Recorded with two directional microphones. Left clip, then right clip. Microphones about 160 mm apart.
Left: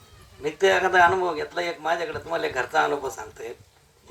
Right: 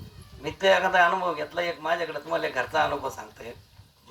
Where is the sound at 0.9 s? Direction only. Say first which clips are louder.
Left 3 dB; 30° left (ahead or behind).